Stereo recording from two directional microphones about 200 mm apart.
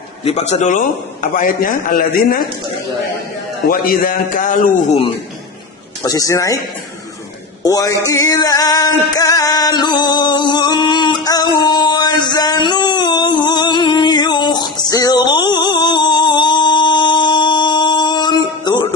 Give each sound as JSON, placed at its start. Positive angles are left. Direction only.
{"t": 0.3, "sound": "a man's voice", "side_deg": 35}
{"t": 3.7, "sound": "a man's voice", "side_deg": 45}
{"t": 6.0, "sound": "a man's voice", "side_deg": 15}
{"t": 7.6, "sound": "a man's voice", "side_deg": 15}
{"t": 8.0, "sound": "music", "side_deg": 15}